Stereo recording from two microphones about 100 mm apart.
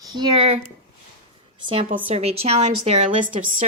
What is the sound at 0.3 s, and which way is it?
Speech, 80° right.